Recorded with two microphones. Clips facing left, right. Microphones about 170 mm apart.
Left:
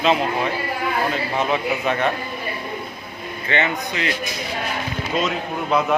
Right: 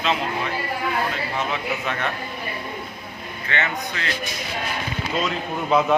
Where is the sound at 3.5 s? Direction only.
20° left (ahead or behind).